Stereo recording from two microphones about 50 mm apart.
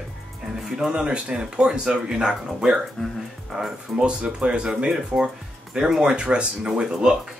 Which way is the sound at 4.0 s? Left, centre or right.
Right.